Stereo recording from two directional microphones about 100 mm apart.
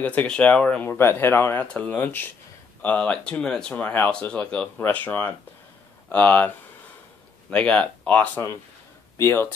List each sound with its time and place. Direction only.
0.0 s speech: 15° left (ahead or behind)
0.8 s speech: 25° left (ahead or behind)
7.5 s speech: 10° left (ahead or behind)
9.2 s speech: 25° left (ahead or behind)